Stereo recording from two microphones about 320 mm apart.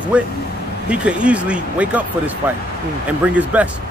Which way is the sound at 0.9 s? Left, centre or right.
Centre.